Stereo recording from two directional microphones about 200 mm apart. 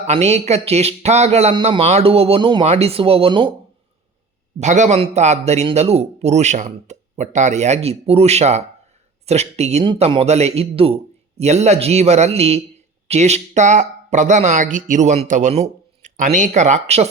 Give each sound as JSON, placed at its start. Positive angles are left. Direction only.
{"t": 0.1, "sound": "speech", "side_deg": -35}
{"t": 4.6, "sound": "speech", "side_deg": -35}